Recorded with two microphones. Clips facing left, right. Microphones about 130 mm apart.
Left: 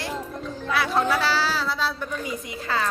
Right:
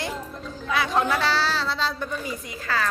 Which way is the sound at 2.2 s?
20° left (ahead or behind).